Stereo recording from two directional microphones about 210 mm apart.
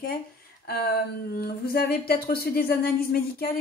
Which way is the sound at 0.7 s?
50° left (ahead or behind).